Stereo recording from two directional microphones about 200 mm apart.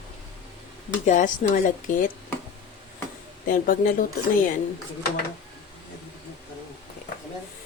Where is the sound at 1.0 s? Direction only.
40° left (ahead or behind).